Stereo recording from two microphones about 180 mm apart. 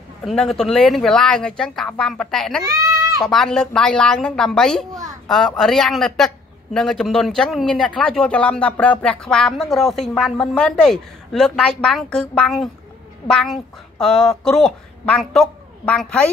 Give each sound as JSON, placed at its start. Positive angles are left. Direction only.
{"t": 0.2, "sound": "speech", "side_deg": 0}
{"t": 2.8, "sound": "a sound", "side_deg": -20}
{"t": 3.3, "sound": "speech", "side_deg": 0}
{"t": 13.9, "sound": "a woman's voice", "side_deg": 5}